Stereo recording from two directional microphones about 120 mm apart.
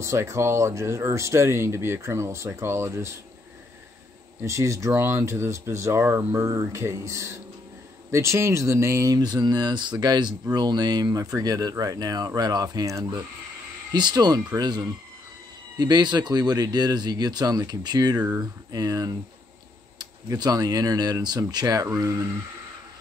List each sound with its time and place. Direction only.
0.0 s speech: 25° right (ahead or behind)
4.4 s speech: 25° right (ahead or behind)